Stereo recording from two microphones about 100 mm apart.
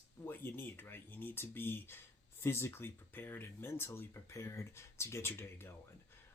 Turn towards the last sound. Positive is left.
turn(degrees=25)  # may be behind; listen again after turning